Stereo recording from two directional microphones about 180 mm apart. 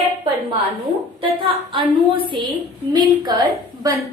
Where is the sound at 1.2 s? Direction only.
30° right (ahead or behind).